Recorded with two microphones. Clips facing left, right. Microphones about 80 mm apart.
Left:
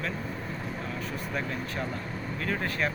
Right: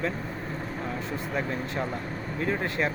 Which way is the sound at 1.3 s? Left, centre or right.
Right.